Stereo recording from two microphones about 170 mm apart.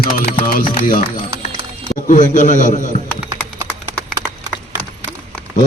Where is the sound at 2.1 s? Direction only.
50° left (ahead or behind).